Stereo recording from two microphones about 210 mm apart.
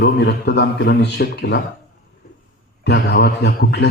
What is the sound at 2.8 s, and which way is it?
A man's voice, 55° left (ahead or behind).